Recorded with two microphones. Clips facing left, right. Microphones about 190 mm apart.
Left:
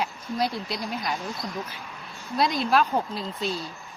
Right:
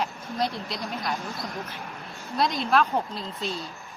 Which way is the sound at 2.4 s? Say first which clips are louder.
Left 1 dB; centre (ahead or behind).